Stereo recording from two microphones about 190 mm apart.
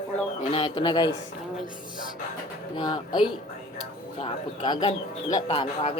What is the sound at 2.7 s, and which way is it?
Speech, 25° left (ahead or behind).